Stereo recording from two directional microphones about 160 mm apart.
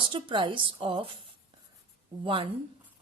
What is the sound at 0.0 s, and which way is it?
Speech, 30° right (ahead or behind).